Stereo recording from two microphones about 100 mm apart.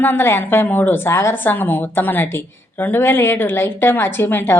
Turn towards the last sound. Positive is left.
turn(degrees=20)  # may be behind; listen again after turning